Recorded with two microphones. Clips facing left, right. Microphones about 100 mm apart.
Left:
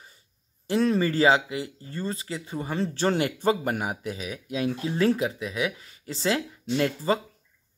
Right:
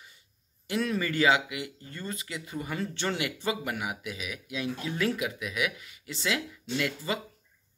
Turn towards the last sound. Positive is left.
turn(degrees=35)  # may be behind; listen again after turning